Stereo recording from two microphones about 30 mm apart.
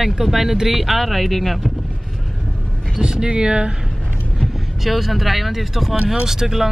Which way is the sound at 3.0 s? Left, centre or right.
Right.